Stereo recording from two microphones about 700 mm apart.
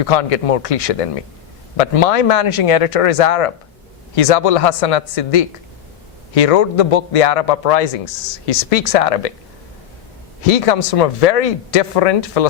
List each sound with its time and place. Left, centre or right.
0.0 s a man's voice: left
10.4 s speech: left